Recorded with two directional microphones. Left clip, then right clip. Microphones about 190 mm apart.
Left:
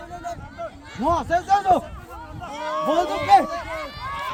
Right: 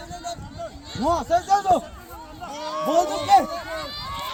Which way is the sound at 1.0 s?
20° right (ahead or behind).